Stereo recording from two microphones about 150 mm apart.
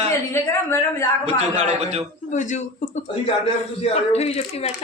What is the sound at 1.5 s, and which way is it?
Speech, 45° right (ahead or behind).